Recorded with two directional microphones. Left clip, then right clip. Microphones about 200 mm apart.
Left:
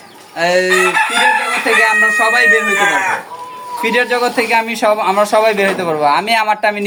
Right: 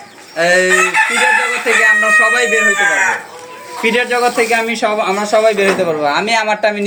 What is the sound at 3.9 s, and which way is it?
A man's voice, 25° left (ahead or behind).